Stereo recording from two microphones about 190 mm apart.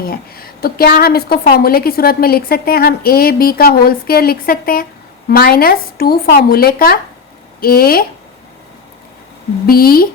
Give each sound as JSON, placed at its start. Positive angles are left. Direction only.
{"t": 0.0, "sound": "a woman's voice", "side_deg": 50}
{"t": 9.6, "sound": "a woman's voice", "side_deg": 50}